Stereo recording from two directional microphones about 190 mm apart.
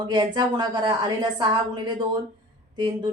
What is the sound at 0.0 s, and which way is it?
A woman's voice, 20° right (ahead or behind).